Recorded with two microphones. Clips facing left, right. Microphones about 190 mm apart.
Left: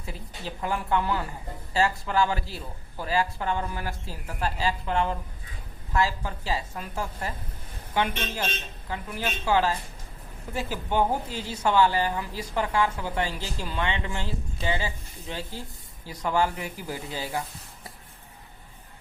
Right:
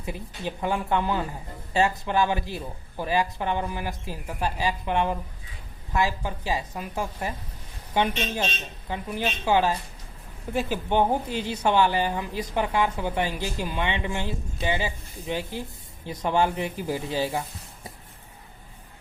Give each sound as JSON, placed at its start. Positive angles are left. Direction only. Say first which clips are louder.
{"t": 0.0, "sound": "a woman's voice", "louder": "right 5 dB", "side_deg": -15}